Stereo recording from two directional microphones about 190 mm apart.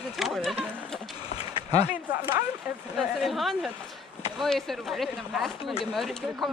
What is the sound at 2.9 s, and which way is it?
Speech, centre (ahead or behind).